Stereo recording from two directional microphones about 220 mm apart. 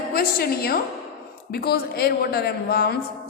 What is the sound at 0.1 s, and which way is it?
A woman's voice, 45° left (ahead or behind).